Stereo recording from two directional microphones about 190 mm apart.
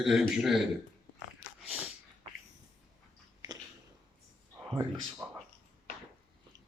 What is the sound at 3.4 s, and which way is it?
Biting, 20° right (ahead or behind).